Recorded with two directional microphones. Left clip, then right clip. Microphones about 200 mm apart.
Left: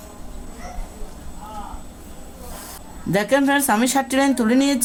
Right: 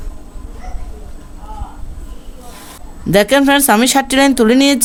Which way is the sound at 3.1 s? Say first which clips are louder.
Right 8 dB; 50° right (ahead or behind).